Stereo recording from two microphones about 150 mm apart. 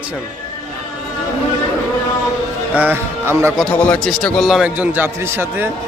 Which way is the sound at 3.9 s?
5° left (ahead or behind).